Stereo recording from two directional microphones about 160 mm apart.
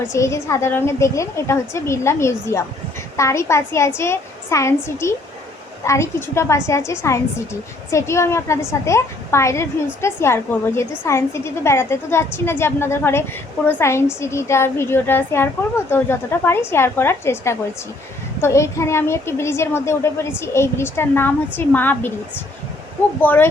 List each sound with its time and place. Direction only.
0.0 s a woman's voice: 20° left (ahead or behind)
23.2 s a woman's voice: 10° left (ahead or behind)